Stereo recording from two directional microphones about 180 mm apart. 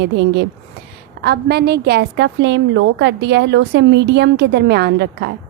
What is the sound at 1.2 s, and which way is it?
A woman's voice, 65° right (ahead or behind).